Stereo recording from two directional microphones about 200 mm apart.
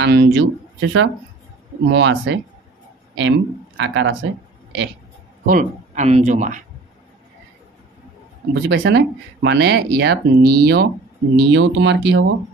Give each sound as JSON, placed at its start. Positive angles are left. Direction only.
{"t": 0.0, "sound": "speech", "side_deg": -60}
{"t": 5.5, "sound": "speech", "side_deg": -40}
{"t": 8.6, "sound": "speech", "side_deg": -60}